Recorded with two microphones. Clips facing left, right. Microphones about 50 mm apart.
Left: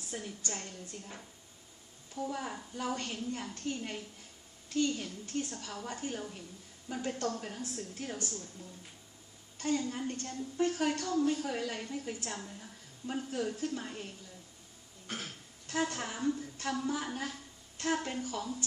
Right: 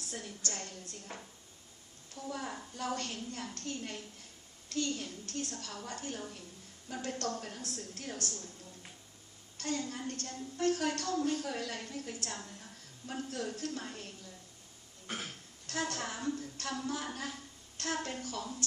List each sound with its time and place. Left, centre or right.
0.0 s a woman's voice: centre
2.1 s a woman's voice: centre
9.6 s a woman's voice: centre
15.0 s cough: centre
15.6 s a woman's voice: centre